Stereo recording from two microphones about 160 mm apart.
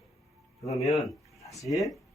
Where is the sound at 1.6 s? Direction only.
Centre (ahead or behind).